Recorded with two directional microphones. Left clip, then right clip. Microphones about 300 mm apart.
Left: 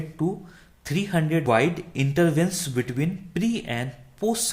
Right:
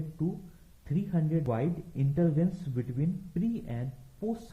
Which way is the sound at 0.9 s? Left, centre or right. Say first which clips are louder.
Left 9 dB; centre.